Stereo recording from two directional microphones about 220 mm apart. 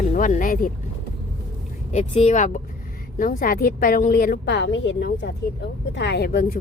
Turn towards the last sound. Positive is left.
turn(degrees=40)  # may be behind; listen again after turning